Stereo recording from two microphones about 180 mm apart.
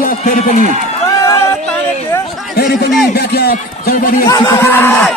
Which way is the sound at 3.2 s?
60° left (ahead or behind).